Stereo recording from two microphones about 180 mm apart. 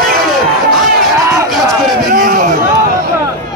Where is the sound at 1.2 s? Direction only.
15° right (ahead or behind).